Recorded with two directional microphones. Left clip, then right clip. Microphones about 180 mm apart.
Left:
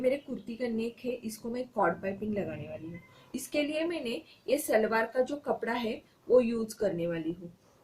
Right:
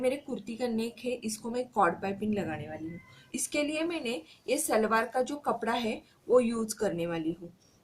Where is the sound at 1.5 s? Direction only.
20° right (ahead or behind).